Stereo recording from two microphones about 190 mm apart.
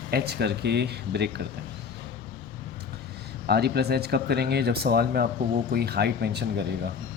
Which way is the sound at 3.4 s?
60° right (ahead or behind).